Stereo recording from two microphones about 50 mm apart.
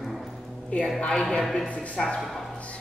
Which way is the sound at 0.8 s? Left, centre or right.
Centre.